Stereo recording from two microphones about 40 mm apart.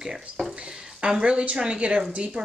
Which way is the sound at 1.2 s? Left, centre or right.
Right.